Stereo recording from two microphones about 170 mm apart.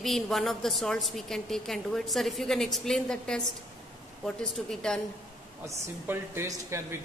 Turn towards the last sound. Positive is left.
turn(degrees=-15)  # may be behind; listen again after turning